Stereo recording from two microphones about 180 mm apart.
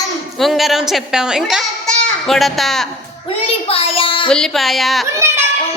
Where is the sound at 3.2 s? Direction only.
30° left (ahead or behind).